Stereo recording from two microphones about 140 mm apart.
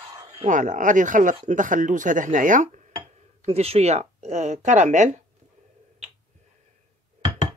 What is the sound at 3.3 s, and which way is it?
Speech, 45° right (ahead or behind).